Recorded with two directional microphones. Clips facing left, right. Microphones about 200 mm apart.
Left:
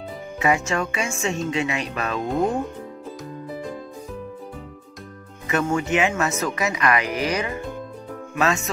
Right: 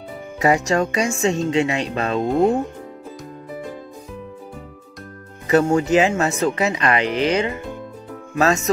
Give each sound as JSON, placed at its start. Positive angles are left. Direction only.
{"t": 0.4, "sound": "speech", "side_deg": -35}
{"t": 5.5, "sound": "speech", "side_deg": -35}
{"t": 8.4, "sound": "speech", "side_deg": -40}